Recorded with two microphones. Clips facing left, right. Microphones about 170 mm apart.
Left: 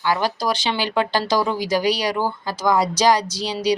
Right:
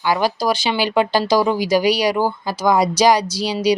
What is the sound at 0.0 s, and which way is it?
Speech, 15° right (ahead or behind).